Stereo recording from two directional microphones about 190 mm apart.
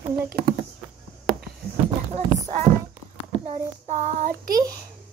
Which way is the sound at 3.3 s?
30° right (ahead or behind).